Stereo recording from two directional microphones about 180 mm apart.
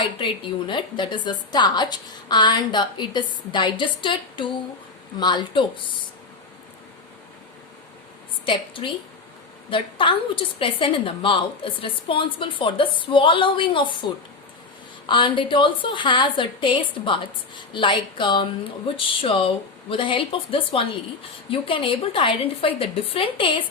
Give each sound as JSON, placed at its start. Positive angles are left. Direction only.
{"t": 0.7, "sound": "a woman's voice", "side_deg": 25}
{"t": 8.4, "sound": "a woman's voice", "side_deg": 30}